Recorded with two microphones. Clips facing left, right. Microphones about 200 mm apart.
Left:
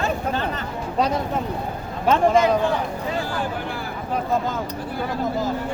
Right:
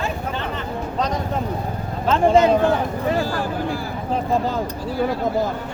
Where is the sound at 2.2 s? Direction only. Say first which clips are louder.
Right 4 dB; 30° right (ahead or behind).